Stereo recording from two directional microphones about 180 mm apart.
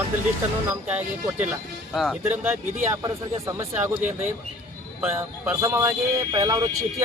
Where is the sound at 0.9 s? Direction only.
10° right (ahead or behind).